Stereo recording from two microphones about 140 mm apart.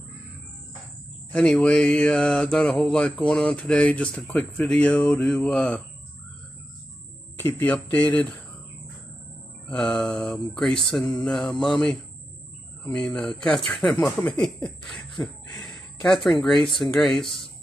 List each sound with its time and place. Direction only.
1.3 s mantra: 10° left (ahead or behind)
7.3 s mantra: 15° left (ahead or behind)
9.7 s speech: 10° left (ahead or behind)
15.0 s a sound: 35° left (ahead or behind)
16.4 s speech: 5° left (ahead or behind)